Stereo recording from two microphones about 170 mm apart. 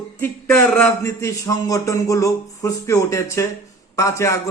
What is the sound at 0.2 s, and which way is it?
A man's voice, 10° left (ahead or behind).